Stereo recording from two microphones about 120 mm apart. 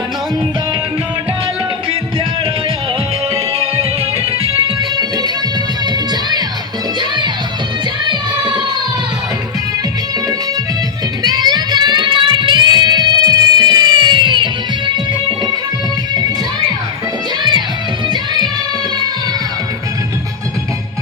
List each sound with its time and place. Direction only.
3.3 s music: 55° right (ahead or behind)
4.8 s music: 35° right (ahead or behind)
8.0 s music: 40° right (ahead or behind)
11.2 s music: 35° right (ahead or behind)